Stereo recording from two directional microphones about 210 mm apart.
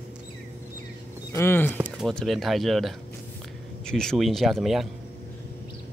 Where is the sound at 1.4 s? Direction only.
10° left (ahead or behind).